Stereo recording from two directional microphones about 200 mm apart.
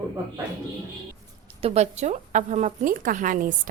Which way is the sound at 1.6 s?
30° right (ahead or behind).